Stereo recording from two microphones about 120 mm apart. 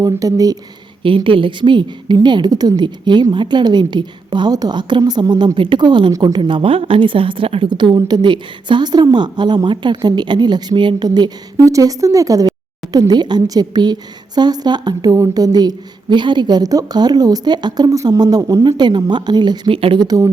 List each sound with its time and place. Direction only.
0.2 s speech: 30° right (ahead or behind)
1.0 s speech: 45° right (ahead or behind)
6.5 s a woman's voice: 50° right (ahead or behind); by 20.2 s 35° right (ahead or behind)